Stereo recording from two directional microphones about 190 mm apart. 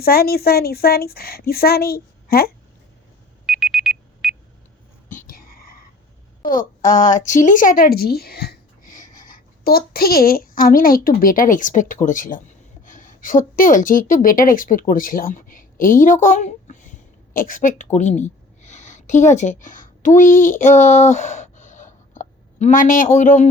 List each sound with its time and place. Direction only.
0.0 s speech: 55° left (ahead or behind)
3.4 s alarm: 5° right (ahead or behind)
5.0 s whispering: 45° left (ahead or behind)
6.4 s a woman's voice: 45° left (ahead or behind)